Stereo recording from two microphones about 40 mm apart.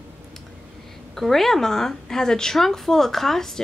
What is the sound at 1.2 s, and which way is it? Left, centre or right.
A woman's voice, centre.